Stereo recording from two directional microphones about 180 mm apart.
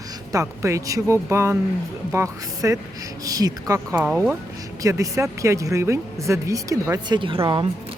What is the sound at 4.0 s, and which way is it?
Speech, 10° right (ahead or behind).